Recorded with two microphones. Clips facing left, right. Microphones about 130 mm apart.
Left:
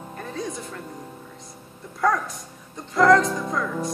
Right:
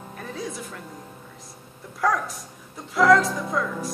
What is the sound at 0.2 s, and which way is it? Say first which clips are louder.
Music: left 2 dB; centre (ahead or behind).